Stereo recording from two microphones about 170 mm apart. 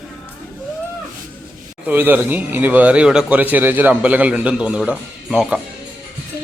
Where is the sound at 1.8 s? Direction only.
10° right (ahead or behind).